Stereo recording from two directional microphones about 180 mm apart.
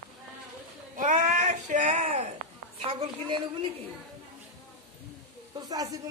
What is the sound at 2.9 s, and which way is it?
Speech, 30° right (ahead or behind).